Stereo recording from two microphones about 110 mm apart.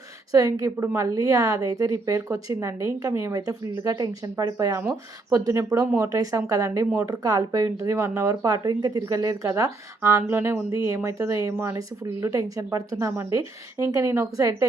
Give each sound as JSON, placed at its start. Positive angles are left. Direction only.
{"t": 0.3, "sound": "a woman's voice", "side_deg": -35}